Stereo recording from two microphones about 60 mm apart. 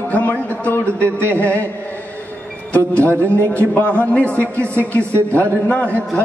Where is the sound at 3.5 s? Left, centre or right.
Left.